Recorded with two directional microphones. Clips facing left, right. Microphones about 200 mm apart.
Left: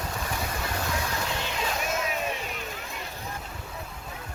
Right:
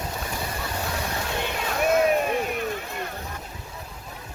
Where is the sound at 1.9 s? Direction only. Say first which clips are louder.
Right 9 dB; 55° right (ahead or behind).